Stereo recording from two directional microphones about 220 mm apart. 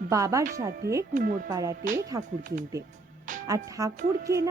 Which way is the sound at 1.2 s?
40° right (ahead or behind).